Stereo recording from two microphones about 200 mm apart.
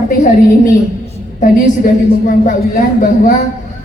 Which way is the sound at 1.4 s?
40° left (ahead or behind).